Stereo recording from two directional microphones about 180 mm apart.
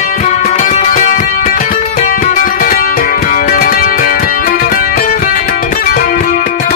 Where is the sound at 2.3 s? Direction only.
45° left (ahead or behind).